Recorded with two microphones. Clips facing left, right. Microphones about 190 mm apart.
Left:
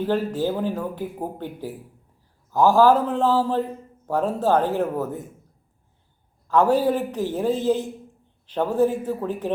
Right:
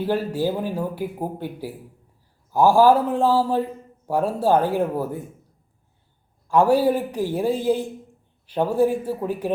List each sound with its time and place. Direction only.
0.0 s a man's voice: 10° right (ahead or behind)
6.5 s a man's voice: 10° right (ahead or behind)